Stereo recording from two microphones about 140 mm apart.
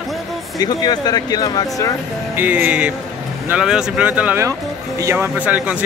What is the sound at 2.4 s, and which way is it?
Speech, 15° right (ahead or behind).